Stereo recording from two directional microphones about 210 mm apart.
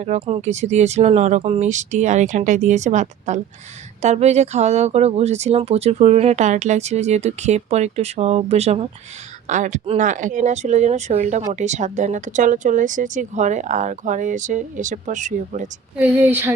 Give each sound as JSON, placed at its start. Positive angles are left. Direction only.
{"t": 0.0, "sound": "speech", "side_deg": -35}
{"t": 16.0, "sound": "a woman's voice", "side_deg": -10}